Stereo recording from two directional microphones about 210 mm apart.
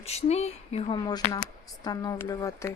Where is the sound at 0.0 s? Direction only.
30° left (ahead or behind).